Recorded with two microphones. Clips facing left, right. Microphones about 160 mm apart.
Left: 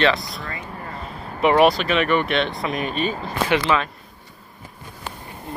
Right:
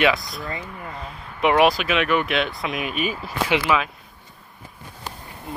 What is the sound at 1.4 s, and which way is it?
Speech, centre (ahead or behind).